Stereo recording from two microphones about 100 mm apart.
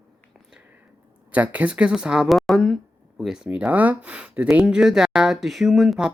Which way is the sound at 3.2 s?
5° right (ahead or behind).